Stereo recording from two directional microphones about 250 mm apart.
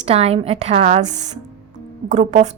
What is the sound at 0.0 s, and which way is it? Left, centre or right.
A woman's voice, right.